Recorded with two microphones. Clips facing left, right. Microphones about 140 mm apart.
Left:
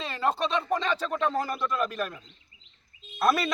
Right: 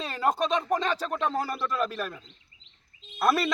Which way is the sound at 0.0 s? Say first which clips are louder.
Right 1 dB; 10° right (ahead or behind).